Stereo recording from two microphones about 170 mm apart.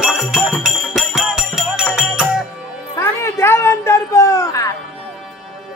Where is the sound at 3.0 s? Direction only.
15° left (ahead or behind).